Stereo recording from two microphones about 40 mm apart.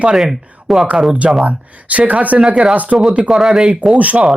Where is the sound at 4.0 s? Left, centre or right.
Right.